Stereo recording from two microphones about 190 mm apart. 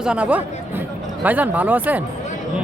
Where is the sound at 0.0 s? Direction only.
5° right (ahead or behind).